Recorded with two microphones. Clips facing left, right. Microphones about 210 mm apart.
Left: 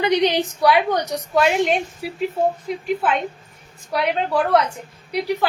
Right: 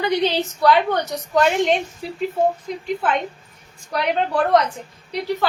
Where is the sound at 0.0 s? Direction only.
20° left (ahead or behind).